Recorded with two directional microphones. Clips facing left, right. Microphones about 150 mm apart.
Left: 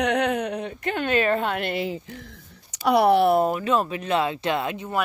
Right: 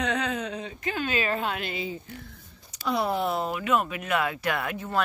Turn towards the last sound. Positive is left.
turn(degrees=20)  # may be behind; listen again after turning